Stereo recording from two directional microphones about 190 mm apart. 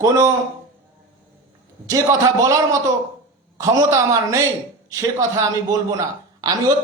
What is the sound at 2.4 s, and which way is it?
A man's voice, 15° right (ahead or behind).